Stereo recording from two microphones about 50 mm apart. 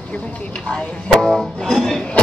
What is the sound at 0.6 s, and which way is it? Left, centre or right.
Speech, left.